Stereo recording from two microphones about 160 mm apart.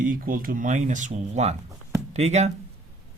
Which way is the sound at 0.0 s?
60° right (ahead or behind).